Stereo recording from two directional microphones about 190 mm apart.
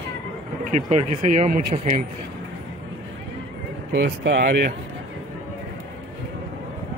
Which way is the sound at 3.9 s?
65° right (ahead or behind).